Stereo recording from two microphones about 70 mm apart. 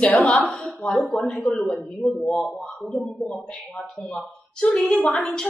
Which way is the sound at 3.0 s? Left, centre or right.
Left.